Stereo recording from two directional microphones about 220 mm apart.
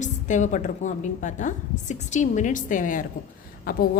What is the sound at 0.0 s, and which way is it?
A woman's voice, 35° left (ahead or behind).